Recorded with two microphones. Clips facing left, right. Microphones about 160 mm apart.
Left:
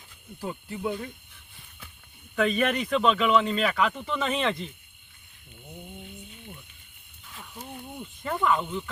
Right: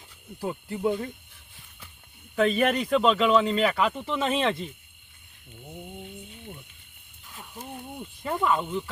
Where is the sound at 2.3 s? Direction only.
30° right (ahead or behind).